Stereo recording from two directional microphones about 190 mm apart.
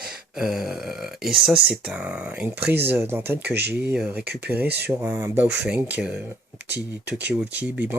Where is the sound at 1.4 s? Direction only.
5° right (ahead or behind).